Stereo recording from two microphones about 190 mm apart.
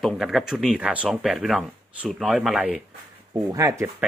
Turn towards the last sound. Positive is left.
turn(degrees=-15)  # may be behind; listen again after turning